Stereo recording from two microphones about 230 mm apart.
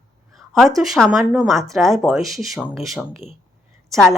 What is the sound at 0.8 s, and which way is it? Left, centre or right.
Speech, centre.